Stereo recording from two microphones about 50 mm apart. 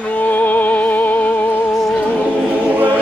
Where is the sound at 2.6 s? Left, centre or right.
Right.